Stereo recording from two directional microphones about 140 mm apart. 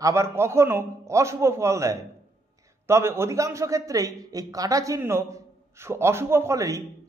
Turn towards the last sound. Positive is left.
turn(degrees=-25)  # may be behind; listen again after turning